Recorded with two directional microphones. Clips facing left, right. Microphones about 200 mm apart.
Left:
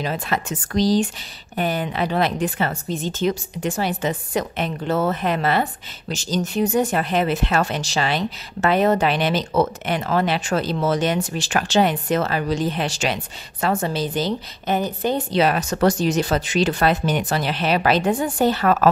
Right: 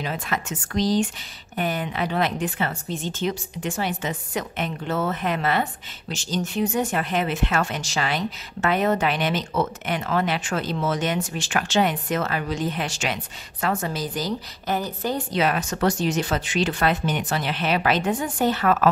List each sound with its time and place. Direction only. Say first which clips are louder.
0.0 s a woman's voice: left 4 dB; 35° left (ahead or behind); by 15.2 s 20° left (ahead or behind)
15.3 s a woman's voice: left 3 dB; 35° left (ahead or behind)